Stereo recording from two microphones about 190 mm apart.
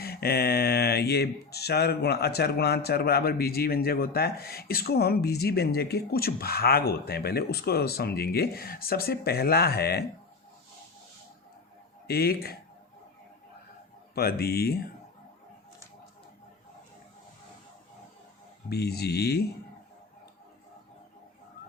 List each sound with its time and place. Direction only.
0.0 s speech: 55° left (ahead or behind)
12.0 s speech: 55° left (ahead or behind)
14.2 s speech: 55° left (ahead or behind)
18.7 s speech: 55° left (ahead or behind)